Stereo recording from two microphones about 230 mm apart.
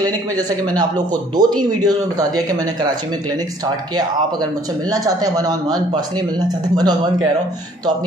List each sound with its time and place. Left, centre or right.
0.0 s speech: centre